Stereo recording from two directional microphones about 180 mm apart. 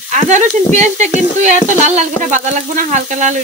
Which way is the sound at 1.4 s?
40° right (ahead or behind).